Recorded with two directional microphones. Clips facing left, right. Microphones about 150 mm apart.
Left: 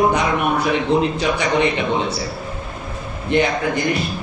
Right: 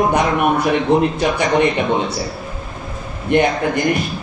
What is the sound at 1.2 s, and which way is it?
Speech, 50° right (ahead or behind).